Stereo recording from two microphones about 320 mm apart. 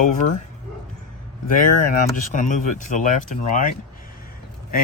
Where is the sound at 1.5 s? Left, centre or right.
Left.